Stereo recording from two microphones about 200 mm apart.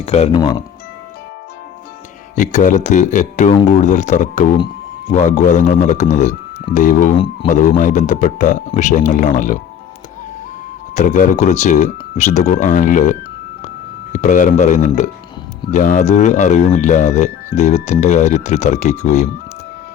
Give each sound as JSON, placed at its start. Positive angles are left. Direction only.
{"t": 0.0, "sound": "speech", "side_deg": 30}
{"t": 2.3, "sound": "speech", "side_deg": 40}
{"t": 4.5, "sound": "a sound", "side_deg": 25}
{"t": 5.1, "sound": "speech", "side_deg": 35}
{"t": 10.9, "sound": "speech", "side_deg": 40}